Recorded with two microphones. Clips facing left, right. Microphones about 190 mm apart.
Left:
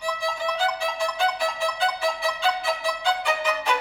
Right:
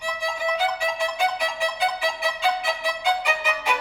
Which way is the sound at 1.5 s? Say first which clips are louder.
Right 1 dB; 15° right (ahead or behind).